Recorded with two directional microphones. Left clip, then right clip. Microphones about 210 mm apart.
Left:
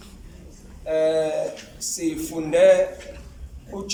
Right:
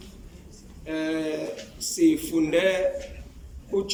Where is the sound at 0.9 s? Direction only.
25° left (ahead or behind).